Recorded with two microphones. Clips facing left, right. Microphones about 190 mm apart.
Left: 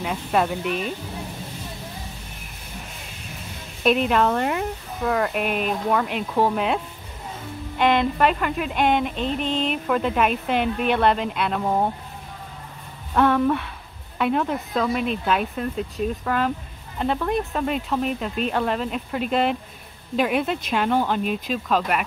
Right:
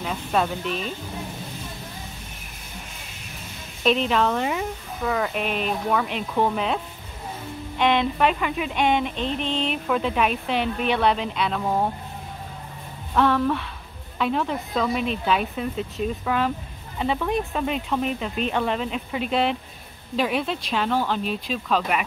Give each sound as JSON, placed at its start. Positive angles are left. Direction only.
{"t": 0.0, "sound": "speech", "side_deg": 5}
{"t": 3.8, "sound": "speech", "side_deg": 5}
{"t": 9.4, "sound": "speech", "side_deg": 45}
{"t": 9.7, "sound": "speech", "side_deg": 0}
{"t": 13.1, "sound": "speech", "side_deg": 5}
{"t": 21.6, "sound": "speech", "side_deg": 0}